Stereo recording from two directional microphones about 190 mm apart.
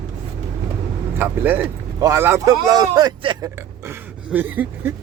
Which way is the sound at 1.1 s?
10° right (ahead or behind).